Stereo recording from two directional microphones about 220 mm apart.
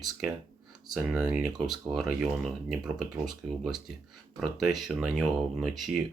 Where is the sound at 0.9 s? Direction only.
5° right (ahead or behind).